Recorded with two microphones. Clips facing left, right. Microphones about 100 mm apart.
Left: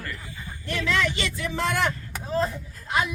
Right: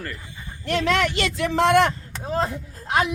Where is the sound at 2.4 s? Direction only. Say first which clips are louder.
Right 3 dB; 80° right.